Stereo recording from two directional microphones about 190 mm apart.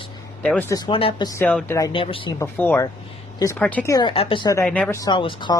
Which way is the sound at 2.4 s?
10° left (ahead or behind).